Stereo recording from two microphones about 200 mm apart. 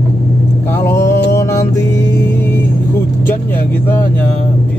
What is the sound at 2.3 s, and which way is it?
Vehicle, 10° left (ahead or behind).